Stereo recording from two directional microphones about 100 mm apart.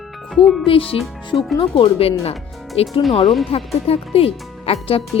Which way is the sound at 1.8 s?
75° left (ahead or behind).